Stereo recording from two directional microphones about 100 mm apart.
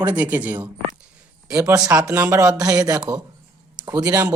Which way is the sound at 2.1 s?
25° right (ahead or behind).